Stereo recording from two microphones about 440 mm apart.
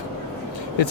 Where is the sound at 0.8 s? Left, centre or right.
Left.